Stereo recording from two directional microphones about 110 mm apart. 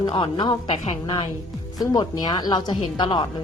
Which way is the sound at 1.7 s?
40° left (ahead or behind).